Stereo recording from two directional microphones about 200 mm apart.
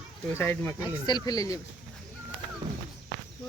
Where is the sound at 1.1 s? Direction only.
20° left (ahead or behind).